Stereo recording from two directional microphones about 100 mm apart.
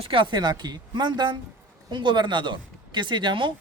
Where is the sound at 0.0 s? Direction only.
60° right (ahead or behind).